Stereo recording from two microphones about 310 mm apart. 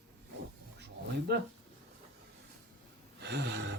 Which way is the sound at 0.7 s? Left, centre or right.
Right.